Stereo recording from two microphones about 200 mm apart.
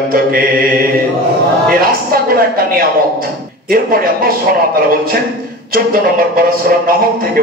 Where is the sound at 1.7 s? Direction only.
45° right (ahead or behind).